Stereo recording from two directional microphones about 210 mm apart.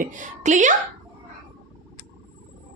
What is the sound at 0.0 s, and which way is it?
Speech, 35° right (ahead or behind).